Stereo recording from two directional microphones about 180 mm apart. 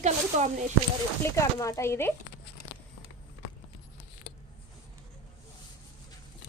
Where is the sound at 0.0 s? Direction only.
40° right (ahead or behind).